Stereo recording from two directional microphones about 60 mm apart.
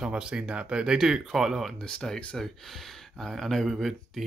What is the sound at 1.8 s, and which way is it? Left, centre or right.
Speech, centre.